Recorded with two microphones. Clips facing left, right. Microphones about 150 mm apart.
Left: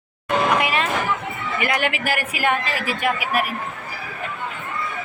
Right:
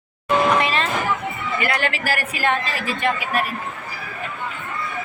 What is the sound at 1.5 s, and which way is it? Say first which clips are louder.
A man's voice: left 1 dB; 15° left (ahead or behind).